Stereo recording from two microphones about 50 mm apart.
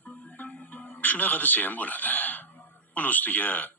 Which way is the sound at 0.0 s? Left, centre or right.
Left.